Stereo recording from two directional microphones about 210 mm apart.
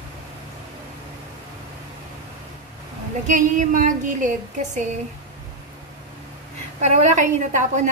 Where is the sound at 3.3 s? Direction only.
35° right (ahead or behind).